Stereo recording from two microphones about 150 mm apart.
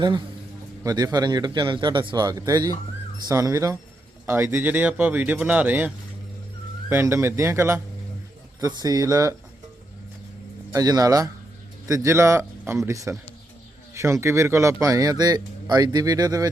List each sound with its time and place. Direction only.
0.9 s speech: 25° right (ahead or behind)
6.9 s speech: 15° right (ahead or behind)
10.7 s speech: 25° right (ahead or behind)